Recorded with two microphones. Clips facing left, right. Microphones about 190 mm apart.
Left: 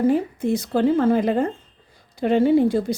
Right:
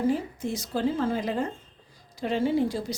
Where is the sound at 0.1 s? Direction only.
60° left (ahead or behind).